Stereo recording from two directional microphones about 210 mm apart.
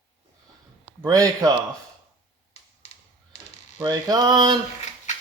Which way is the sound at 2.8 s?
30° left (ahead or behind).